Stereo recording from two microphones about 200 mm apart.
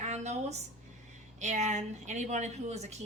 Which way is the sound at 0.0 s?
35° right (ahead or behind).